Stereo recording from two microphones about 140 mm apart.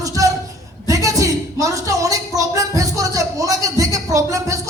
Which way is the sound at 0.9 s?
25° right (ahead or behind).